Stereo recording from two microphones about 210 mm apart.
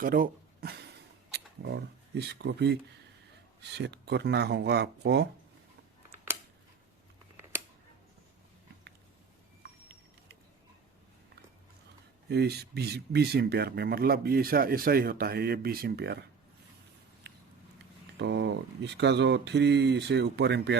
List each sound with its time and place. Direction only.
0.0 s a sound: 45° right (ahead or behind)
1.3 s speech: 50° right (ahead or behind)
9.6 s vehicle: 50° right (ahead or behind)
12.3 s speech: 50° right (ahead or behind)
17.2 s a sound: 55° right (ahead or behind)
18.2 s speech: 55° right (ahead or behind)